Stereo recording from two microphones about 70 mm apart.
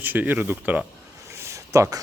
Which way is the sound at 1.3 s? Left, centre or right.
Right.